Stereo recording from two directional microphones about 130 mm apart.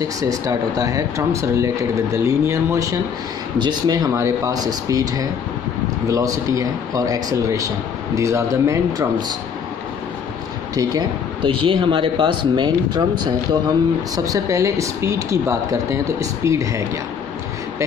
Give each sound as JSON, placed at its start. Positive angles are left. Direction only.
{"t": 0.2, "sound": "speech", "side_deg": -25}
{"t": 10.7, "sound": "speech", "side_deg": -30}